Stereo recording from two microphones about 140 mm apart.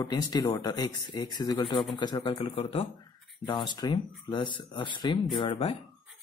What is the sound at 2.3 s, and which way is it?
Speech, 45° left (ahead or behind).